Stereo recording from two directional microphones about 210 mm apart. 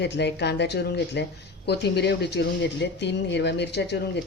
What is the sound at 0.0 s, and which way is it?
Speech, 55° left (ahead or behind).